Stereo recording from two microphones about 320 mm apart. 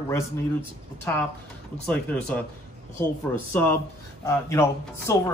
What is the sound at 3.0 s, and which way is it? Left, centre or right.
Speech, centre.